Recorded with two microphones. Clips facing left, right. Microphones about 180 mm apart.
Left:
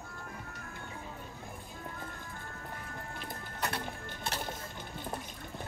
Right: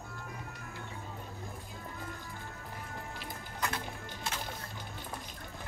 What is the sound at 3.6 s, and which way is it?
Music, 65° left (ahead or behind).